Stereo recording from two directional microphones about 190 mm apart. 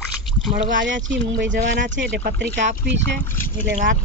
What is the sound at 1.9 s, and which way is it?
Speech, 60° right (ahead or behind).